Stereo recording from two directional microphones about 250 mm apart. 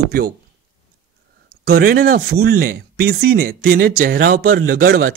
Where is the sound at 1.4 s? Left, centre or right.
Right.